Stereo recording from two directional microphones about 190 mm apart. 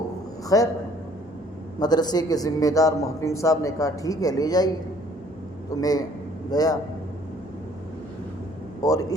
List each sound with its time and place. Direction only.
0.4 s a man's voice: 20° left (ahead or behind)
1.8 s speech: 20° left (ahead or behind)
5.7 s a man's voice: 20° left (ahead or behind)
8.8 s a man's voice: 20° left (ahead or behind)